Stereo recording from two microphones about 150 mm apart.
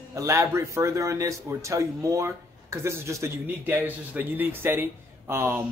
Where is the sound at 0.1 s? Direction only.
20° right (ahead or behind).